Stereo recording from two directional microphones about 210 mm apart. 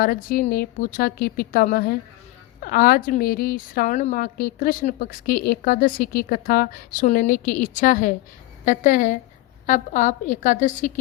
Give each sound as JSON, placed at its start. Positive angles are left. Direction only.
{"t": 0.0, "sound": "a woman's voice", "side_deg": 45}